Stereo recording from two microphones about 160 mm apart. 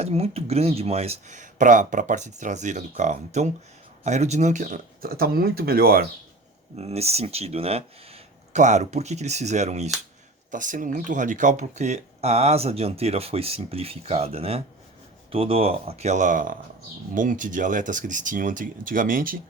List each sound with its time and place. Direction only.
0.0 s speech: 40° right (ahead or behind); by 6.1 s 70° right (ahead or behind)
6.7 s speech: 40° right (ahead or behind)
10.5 s speech: 55° right (ahead or behind)